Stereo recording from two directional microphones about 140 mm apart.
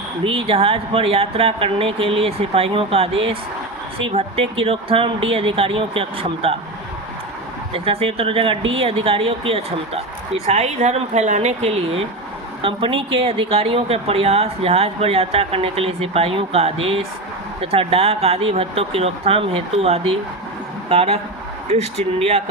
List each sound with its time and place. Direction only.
0.3 s a woman's voice: 40° right (ahead or behind)
7.7 s a woman's voice: 40° right (ahead or behind)